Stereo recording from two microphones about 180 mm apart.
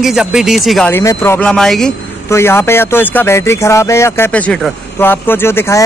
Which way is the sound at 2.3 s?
15° left (ahead or behind).